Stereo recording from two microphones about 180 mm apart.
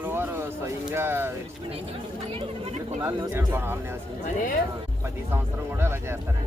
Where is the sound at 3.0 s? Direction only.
15° right (ahead or behind).